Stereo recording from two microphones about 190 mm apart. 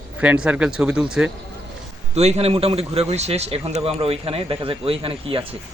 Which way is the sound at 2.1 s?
35° right (ahead or behind).